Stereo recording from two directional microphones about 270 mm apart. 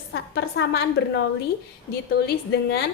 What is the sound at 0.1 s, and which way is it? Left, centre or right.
A woman's voice, left.